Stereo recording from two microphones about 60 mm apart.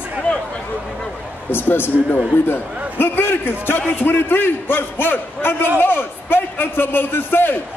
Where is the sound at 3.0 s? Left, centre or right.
Left.